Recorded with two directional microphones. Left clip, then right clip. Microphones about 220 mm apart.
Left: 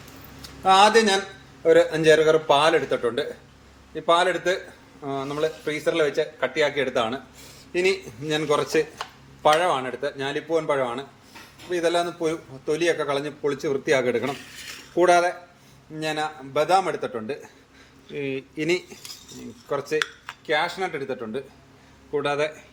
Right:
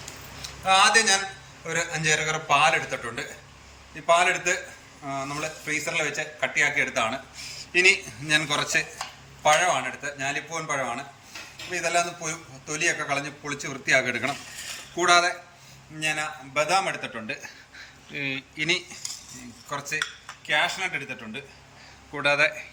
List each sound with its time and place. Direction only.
0.6 s a man's voice: 35° left (ahead or behind)
20.5 s a man's voice: 20° left (ahead or behind)
22.1 s a man's voice: 10° left (ahead or behind)